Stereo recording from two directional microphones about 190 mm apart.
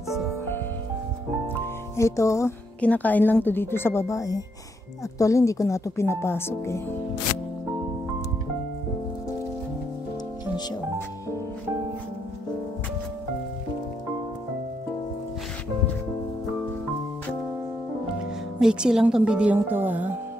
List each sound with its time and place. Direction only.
1.5 s speech: 15° left (ahead or behind)
18.6 s speech: 5° right (ahead or behind)